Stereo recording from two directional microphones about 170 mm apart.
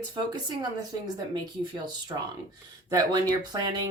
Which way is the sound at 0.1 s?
25° right (ahead or behind).